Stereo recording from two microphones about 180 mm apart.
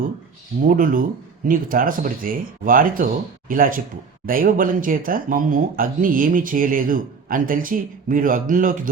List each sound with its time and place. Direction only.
0.6 s speech: 50° right (ahead or behind)